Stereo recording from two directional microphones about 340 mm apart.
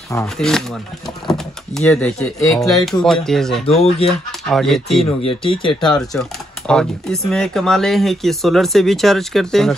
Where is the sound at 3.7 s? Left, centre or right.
Centre.